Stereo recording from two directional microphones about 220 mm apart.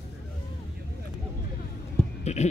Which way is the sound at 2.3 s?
30° left (ahead or behind).